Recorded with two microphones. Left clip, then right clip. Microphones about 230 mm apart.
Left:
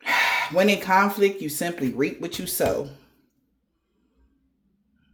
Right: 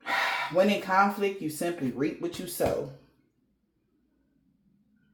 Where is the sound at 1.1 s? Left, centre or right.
Left.